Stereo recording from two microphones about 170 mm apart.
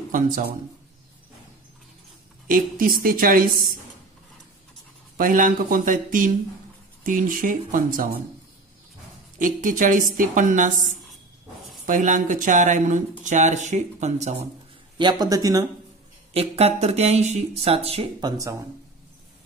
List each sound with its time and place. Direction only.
0.1 s a woman's voice: 55° right (ahead or behind)
2.4 s a woman's voice: 55° right (ahead or behind)
5.1 s a woman's voice: 55° right (ahead or behind)
9.4 s a woman's voice: 50° right (ahead or behind)
15.0 s speech: 25° right (ahead or behind)
16.3 s speech: 35° right (ahead or behind); by 18.6 s 20° right (ahead or behind)